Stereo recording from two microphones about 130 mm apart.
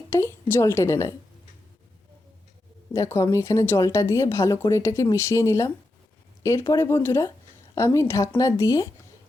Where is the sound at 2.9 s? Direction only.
25° left (ahead or behind).